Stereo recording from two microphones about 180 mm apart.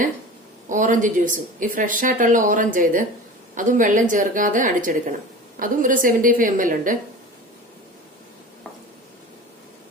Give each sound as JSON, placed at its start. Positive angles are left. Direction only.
{"t": 0.7, "sound": "a woman's voice", "side_deg": -45}